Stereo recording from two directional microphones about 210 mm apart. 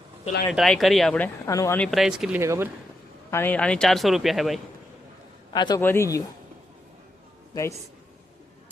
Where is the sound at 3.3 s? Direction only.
10° left (ahead or behind).